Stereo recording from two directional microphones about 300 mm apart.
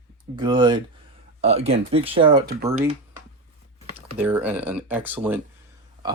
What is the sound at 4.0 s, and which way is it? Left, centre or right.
Speech, centre.